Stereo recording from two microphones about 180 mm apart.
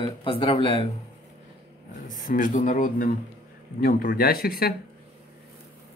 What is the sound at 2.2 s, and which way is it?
Speech, 50° left (ahead or behind).